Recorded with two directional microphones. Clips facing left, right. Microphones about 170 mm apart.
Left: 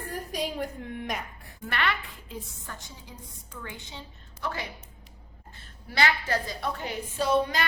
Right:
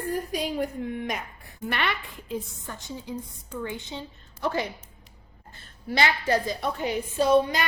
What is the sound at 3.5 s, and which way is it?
Speech, 25° right (ahead or behind).